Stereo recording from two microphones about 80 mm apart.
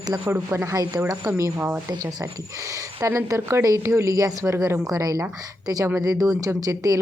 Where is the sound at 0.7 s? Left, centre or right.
Right.